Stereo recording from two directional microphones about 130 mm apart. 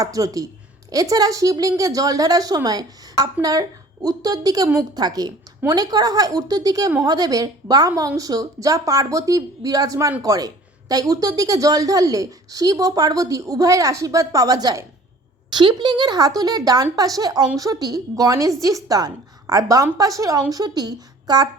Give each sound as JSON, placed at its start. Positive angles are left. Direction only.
{"t": 0.0, "sound": "a woman's voice", "side_deg": -25}